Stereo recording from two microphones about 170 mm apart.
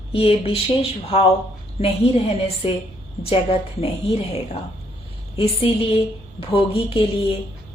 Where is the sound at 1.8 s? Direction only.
35° left (ahead or behind).